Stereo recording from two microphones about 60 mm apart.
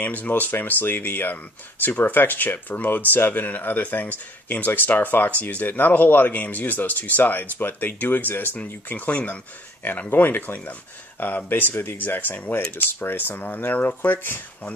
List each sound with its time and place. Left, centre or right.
0.0 s speech: left